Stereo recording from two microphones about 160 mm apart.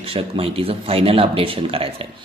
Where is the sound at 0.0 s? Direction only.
35° right (ahead or behind).